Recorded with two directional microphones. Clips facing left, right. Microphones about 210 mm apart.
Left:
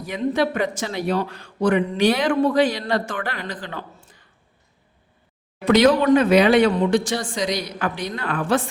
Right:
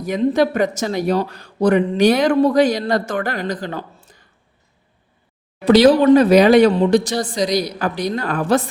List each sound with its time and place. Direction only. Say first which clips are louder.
0.0 s speech: right 5 dB; 40° right (ahead or behind)
5.6 s speech: right 5 dB; 35° right (ahead or behind)